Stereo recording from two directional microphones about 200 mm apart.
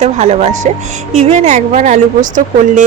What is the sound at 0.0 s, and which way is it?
A woman's voice, 35° right (ahead or behind).